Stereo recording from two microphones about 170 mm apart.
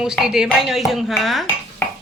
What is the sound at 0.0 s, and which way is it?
Speech, 5° right (ahead or behind).